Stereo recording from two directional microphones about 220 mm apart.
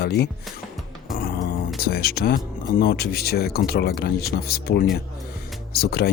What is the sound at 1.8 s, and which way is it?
Speech, 45° left (ahead or behind).